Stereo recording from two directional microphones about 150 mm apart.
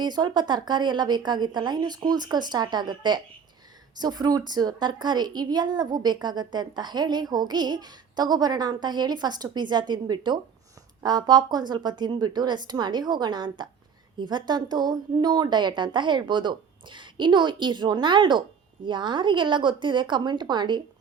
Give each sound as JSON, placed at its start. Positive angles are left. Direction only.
{"t": 0.0, "sound": "a woman's voice", "side_deg": -30}